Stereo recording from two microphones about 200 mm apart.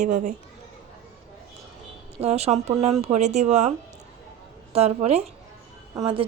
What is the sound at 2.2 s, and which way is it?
A woman's voice, 30° right (ahead or behind).